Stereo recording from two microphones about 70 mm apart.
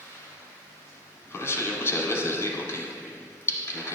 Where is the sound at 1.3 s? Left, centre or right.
Left.